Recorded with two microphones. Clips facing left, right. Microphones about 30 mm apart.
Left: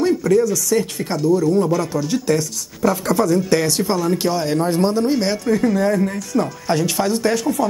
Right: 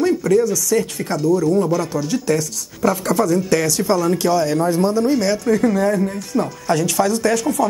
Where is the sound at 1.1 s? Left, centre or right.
Left.